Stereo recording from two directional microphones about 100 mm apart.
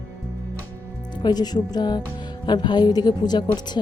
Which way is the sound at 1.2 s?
45° left (ahead or behind).